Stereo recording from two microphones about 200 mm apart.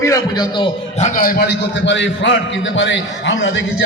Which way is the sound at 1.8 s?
65° left (ahead or behind).